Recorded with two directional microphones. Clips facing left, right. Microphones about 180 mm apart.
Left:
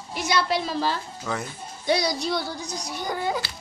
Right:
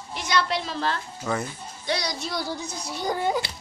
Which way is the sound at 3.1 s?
25° right (ahead or behind).